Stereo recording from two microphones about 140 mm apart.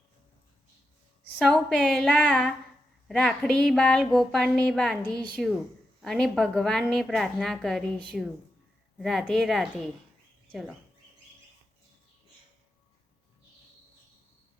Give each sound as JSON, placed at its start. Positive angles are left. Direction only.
{"t": 1.4, "sound": "a woman's voice", "side_deg": 5}
{"t": 9.0, "sound": "a woman's voice", "side_deg": 0}